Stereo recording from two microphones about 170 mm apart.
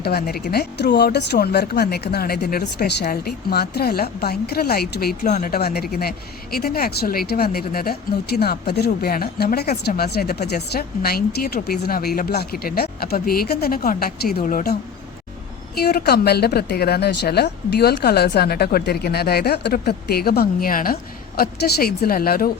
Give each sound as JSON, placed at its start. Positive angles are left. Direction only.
{"t": 0.0, "sound": "a woman's voice", "side_deg": 65}
{"t": 5.2, "sound": "speech", "side_deg": 50}
{"t": 15.7, "sound": "a woman's voice", "side_deg": 65}